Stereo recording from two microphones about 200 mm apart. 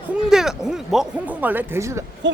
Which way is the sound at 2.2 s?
65° right (ahead or behind).